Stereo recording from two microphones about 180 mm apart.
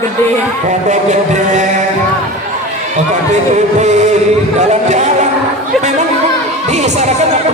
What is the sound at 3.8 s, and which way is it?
Speech, 40° right (ahead or behind).